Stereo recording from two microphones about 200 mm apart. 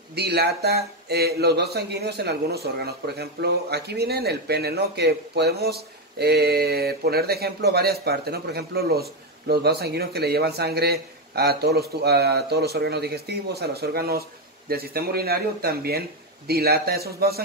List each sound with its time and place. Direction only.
0.1 s speech: 55° right (ahead or behind)